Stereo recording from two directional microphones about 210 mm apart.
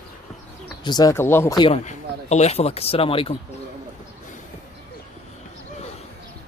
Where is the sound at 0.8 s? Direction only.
20° left (ahead or behind).